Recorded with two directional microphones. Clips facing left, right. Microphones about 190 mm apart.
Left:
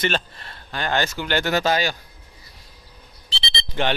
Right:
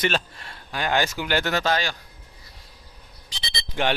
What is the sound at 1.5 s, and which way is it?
Speech, 10° left (ahead or behind).